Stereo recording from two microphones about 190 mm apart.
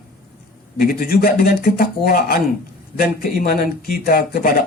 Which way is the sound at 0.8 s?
50° left (ahead or behind).